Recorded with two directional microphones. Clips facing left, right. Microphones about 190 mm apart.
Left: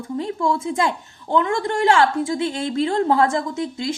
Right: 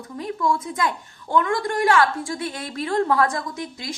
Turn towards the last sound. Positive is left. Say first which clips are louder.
# left 7 dB
turn(degrees=25)  # may be behind; listen again after turning